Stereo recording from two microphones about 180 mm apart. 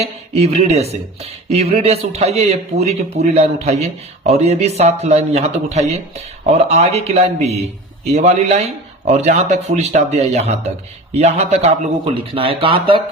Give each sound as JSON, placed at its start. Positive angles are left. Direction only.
{"t": 0.0, "sound": "speech", "side_deg": -35}